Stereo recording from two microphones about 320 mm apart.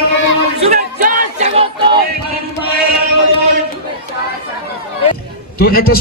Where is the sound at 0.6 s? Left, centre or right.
Right.